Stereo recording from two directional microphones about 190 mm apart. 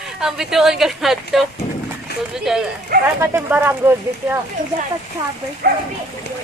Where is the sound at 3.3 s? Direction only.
10° right (ahead or behind).